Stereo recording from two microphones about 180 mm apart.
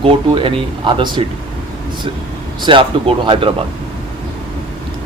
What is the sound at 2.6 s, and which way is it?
Speech, 30° right (ahead or behind).